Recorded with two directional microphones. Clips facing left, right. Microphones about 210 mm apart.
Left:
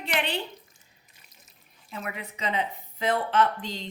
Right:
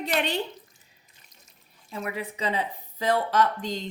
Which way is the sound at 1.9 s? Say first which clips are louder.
Right 4 dB; 30° right (ahead or behind).